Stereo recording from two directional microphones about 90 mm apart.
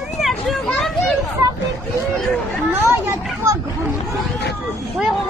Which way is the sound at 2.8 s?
30° right (ahead or behind).